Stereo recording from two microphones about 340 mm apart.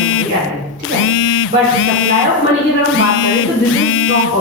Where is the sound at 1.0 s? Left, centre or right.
Left.